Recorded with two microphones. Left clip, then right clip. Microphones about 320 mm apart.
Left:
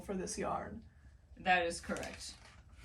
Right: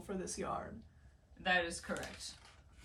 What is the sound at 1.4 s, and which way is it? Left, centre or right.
Speech, centre.